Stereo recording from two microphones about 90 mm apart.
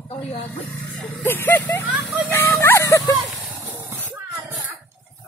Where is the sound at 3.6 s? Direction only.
25° right (ahead or behind).